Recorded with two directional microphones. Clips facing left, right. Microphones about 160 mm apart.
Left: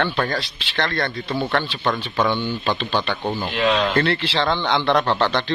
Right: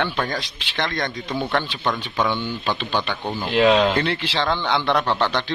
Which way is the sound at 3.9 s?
10° right (ahead or behind).